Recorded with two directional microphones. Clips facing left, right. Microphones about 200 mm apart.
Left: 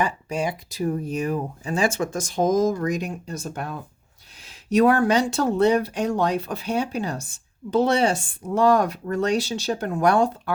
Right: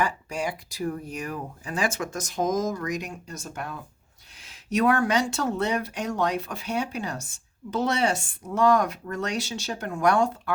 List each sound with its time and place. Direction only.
0.0 s speech: 20° left (ahead or behind)